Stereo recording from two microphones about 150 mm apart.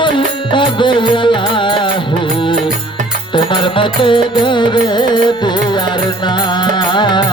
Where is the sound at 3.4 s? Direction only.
35° left (ahead or behind).